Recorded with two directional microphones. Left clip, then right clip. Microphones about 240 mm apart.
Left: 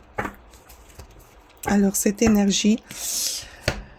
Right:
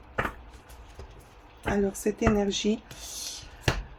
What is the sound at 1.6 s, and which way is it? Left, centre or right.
Speech, left.